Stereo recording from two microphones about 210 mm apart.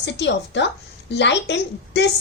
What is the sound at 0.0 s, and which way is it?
A woman's voice, 55° left (ahead or behind).